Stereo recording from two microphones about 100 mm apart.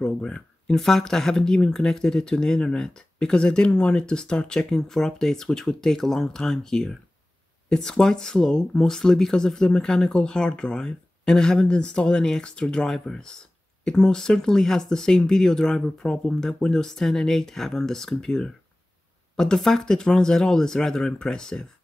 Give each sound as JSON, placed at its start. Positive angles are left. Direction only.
{"t": 0.0, "sound": "speech", "side_deg": 10}